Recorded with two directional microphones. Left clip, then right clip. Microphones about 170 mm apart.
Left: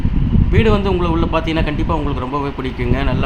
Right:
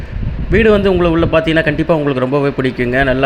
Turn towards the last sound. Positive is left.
turn(degrees=-20)  # may be behind; listen again after turning